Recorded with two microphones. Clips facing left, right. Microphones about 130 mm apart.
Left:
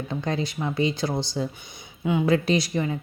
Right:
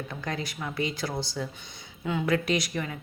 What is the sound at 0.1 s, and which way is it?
A woman's voice, 25° left (ahead or behind).